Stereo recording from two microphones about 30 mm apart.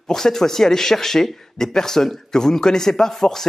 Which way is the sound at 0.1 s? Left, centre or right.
Centre.